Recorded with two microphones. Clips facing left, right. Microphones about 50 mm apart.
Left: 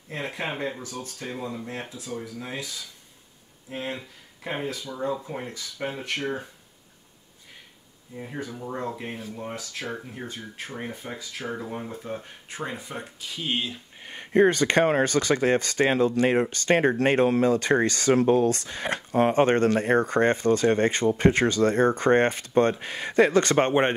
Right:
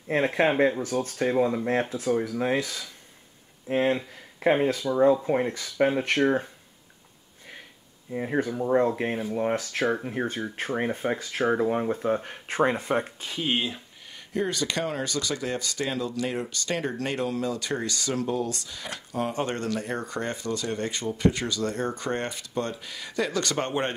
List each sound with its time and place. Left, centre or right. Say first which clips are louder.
0.1 s speech: right 9 dB; right
8.1 s speech: right 8 dB; right
8.5 s speech: right 10 dB; right
13.0 s speech: right 1 dB; right
13.4 s speech: right 2 dB; centre
14.0 s speech: left 9 dB; left